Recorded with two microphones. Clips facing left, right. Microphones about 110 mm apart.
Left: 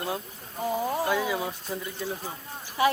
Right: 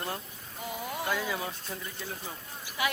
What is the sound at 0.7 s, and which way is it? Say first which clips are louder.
Speech: left 8 dB; 35° left (ahead or behind).